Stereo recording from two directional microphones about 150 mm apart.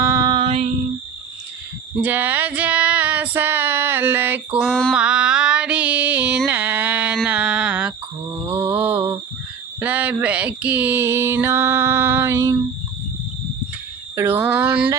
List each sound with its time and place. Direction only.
0.0 s mantra: 20° right (ahead or behind)
0.4 s female singing: 45° right (ahead or behind)
2.0 s female singing: 10° right (ahead or behind)
4.6 s female singing: 5° left (ahead or behind)
4.9 s music: 5° right (ahead or behind)
7.3 s a sound: 10° right (ahead or behind)
8.5 s mantra: 15° right (ahead or behind)
9.8 s music: 10° right (ahead or behind)
14.2 s music: 15° right (ahead or behind)